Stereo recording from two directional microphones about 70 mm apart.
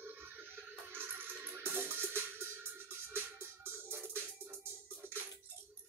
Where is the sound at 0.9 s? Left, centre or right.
Right.